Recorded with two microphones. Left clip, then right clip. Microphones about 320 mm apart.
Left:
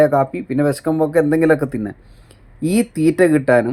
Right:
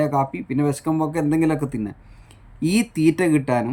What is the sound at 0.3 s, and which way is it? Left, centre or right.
Speech, centre.